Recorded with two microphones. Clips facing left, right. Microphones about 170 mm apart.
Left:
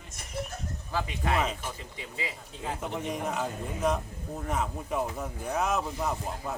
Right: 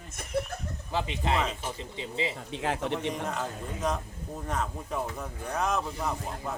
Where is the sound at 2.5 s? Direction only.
80° right.